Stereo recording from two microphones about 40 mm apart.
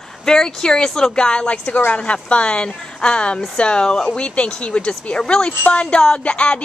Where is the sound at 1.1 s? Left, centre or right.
Left.